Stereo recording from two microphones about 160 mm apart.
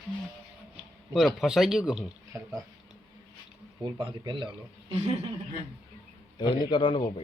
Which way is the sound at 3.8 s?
30° right (ahead or behind).